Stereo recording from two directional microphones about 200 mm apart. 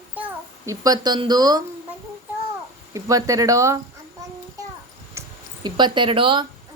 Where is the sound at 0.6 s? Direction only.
15° right (ahead or behind).